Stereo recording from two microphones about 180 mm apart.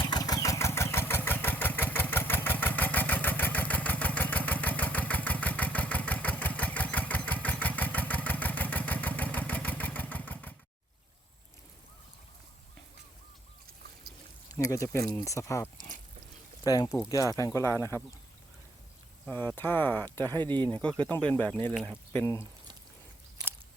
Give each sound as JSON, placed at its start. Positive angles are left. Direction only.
{"t": 0.1, "sound": "engine", "side_deg": 20}
{"t": 14.5, "sound": "speech", "side_deg": 20}
{"t": 17.7, "sound": "speech", "side_deg": -20}
{"t": 19.2, "sound": "speech", "side_deg": 10}
{"t": 20.2, "sound": "speech", "side_deg": -25}
{"t": 20.5, "sound": "speech", "side_deg": 10}